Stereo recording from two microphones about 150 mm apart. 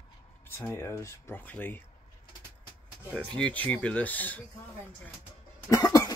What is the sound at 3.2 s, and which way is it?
Speech, 10° left (ahead or behind).